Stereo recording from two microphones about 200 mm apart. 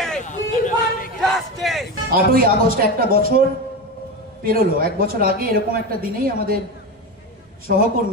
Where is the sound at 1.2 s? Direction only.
Centre (ahead or behind).